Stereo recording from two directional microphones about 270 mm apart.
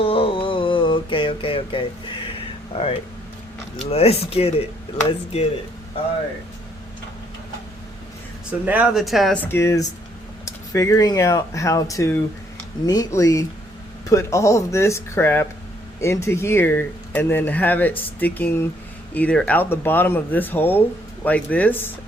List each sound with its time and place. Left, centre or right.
0.0 s a sound: left
3.8 s speech: left
8.6 s speech: centre